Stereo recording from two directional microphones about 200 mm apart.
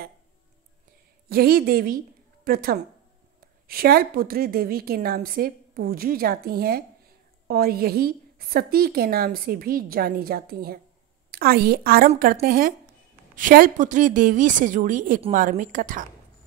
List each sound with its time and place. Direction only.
1.3 s a woman's voice: 50° right (ahead or behind)